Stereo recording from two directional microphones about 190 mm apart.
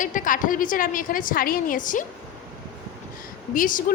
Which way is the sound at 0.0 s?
45° left (ahead or behind).